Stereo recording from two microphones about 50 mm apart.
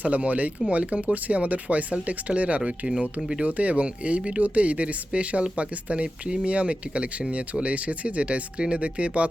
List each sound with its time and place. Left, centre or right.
0.0 s speech: right